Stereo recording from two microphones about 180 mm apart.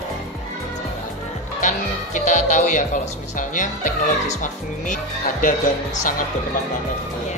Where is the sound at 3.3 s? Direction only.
45° left (ahead or behind).